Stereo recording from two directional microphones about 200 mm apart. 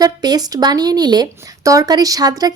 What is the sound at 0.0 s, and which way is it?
A woman's voice, 20° right (ahead or behind).